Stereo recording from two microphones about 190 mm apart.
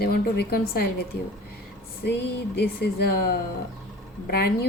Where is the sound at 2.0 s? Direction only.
60° left (ahead or behind).